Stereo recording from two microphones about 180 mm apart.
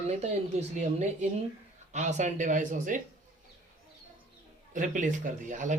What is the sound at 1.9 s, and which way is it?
Speech, 40° right (ahead or behind).